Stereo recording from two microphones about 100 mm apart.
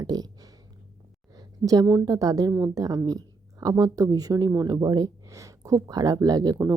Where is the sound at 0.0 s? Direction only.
40° right (ahead or behind).